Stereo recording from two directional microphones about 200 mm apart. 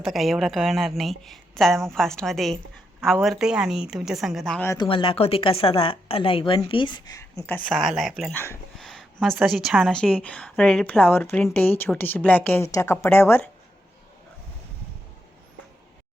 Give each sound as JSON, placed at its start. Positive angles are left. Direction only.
{"t": 0.0, "sound": "a woman's voice", "side_deg": 0}
{"t": 4.7, "sound": "speech", "side_deg": 20}
{"t": 7.6, "sound": "a woman's voice", "side_deg": 0}